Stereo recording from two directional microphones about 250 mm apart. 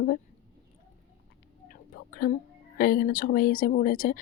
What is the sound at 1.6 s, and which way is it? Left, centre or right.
Speech, left.